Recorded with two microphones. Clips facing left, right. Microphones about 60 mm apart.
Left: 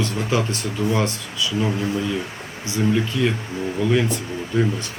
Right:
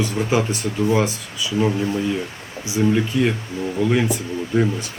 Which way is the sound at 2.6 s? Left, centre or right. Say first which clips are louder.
Right 2 dB; centre.